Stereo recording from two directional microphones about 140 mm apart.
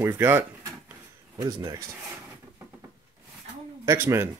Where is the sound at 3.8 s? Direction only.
20° right (ahead or behind).